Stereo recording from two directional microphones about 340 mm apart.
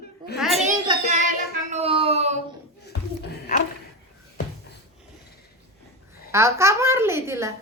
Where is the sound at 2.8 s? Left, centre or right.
Left.